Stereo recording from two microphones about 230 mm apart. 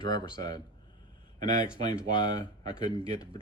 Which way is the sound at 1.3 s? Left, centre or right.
Right.